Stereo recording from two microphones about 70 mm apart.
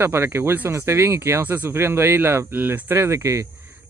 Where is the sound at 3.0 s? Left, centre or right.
Right.